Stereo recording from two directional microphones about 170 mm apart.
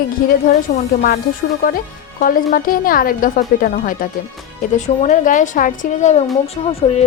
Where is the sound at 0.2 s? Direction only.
55° left (ahead or behind).